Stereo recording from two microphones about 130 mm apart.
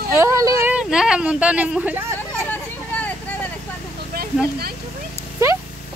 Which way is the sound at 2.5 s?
10° left (ahead or behind).